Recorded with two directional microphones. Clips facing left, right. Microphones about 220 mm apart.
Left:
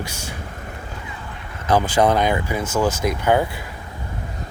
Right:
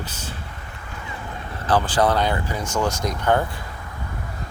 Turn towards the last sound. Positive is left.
turn(degrees=10)  # may be behind; listen again after turning